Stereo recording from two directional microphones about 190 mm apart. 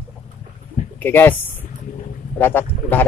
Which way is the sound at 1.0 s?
10° left (ahead or behind).